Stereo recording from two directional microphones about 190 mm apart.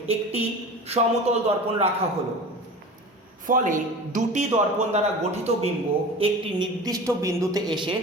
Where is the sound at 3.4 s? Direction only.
45° right (ahead or behind).